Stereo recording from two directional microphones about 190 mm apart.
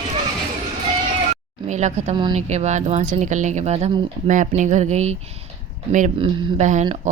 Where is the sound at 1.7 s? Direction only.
40° right (ahead or behind).